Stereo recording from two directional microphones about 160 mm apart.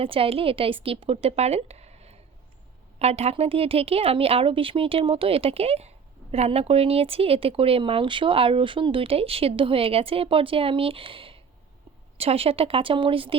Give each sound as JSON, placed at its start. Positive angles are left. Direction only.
{"t": 0.0, "sound": "speech", "side_deg": -35}